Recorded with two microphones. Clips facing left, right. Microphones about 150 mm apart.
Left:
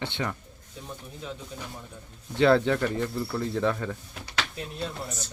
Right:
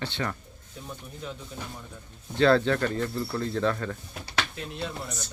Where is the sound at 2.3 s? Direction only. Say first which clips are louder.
Even; 20° left (ahead or behind).